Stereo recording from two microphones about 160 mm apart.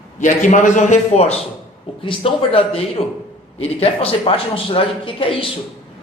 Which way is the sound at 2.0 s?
35° left (ahead or behind).